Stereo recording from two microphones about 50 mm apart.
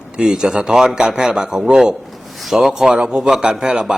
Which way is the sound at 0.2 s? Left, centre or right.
Centre.